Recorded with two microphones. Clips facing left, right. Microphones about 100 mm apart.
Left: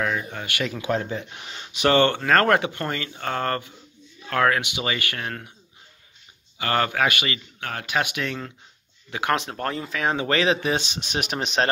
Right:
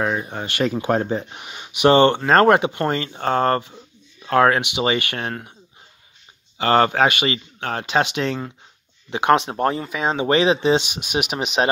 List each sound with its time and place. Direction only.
0.0 s speech: 30° right (ahead or behind)
1.4 s speech: 15° right (ahead or behind)
6.6 s speech: 30° right (ahead or behind)
10.9 s speech: 10° right (ahead or behind)